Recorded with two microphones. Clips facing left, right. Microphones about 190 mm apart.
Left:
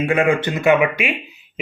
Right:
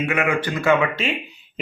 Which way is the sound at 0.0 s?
30° left (ahead or behind).